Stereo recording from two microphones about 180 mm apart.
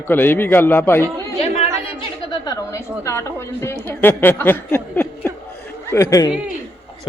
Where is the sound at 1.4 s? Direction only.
35° left (ahead or behind).